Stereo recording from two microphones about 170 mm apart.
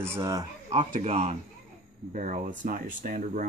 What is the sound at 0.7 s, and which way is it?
Speech, 40° right (ahead or behind).